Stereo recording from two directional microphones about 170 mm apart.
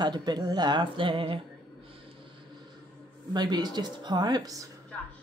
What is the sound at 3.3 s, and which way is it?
Speech, 25° right (ahead or behind).